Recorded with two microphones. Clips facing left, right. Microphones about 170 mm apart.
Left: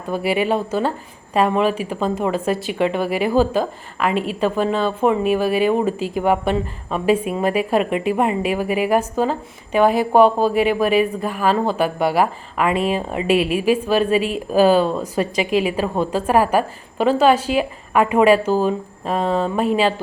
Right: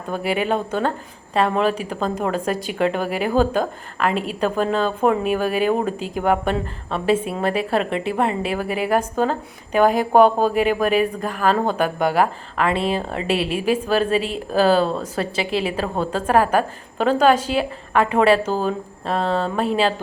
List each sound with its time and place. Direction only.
0.3 s a woman's voice: 5° left (ahead or behind)
12.7 s speech: 35° right (ahead or behind)
13.0 s a woman's voice: 10° left (ahead or behind)
13.3 s speech: 35° right (ahead or behind)
13.7 s a woman's voice: 10° left (ahead or behind)